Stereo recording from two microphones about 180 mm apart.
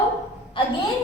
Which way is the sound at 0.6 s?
25° left (ahead or behind).